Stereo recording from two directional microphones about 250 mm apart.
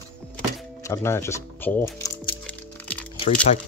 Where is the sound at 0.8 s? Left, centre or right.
Centre.